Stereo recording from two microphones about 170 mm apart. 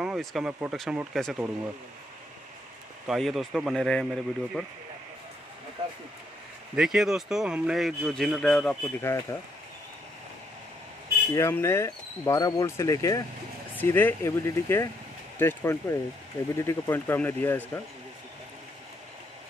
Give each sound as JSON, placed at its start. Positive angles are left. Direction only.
{"t": 0.0, "sound": "speech", "side_deg": 0}
{"t": 3.1, "sound": "speech", "side_deg": 0}
{"t": 6.7, "sound": "speech", "side_deg": -5}
{"t": 9.0, "sound": "speech", "side_deg": 15}
{"t": 11.3, "sound": "speech", "side_deg": 15}